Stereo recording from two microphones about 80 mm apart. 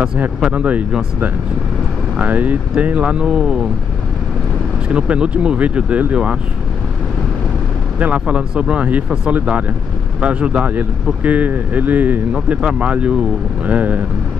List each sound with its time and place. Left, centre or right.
0.0 s speech: centre
4.8 s speech: centre
8.0 s speech: centre